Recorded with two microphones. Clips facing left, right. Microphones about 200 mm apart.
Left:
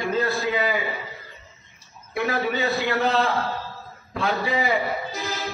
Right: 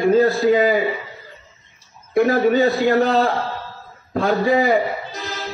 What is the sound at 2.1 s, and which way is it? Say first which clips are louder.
A man's voice: right 10 dB; 45° right (ahead or behind).